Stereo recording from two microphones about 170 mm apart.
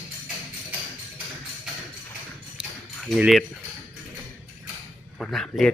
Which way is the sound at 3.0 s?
Centre (ahead or behind).